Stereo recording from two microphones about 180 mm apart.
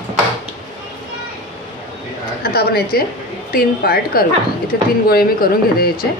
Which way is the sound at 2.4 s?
60° left (ahead or behind).